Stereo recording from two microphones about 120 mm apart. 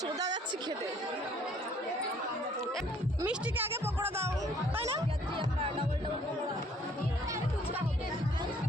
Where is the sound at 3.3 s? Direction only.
15° right (ahead or behind).